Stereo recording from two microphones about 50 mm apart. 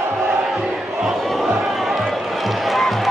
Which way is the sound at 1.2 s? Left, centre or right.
Centre.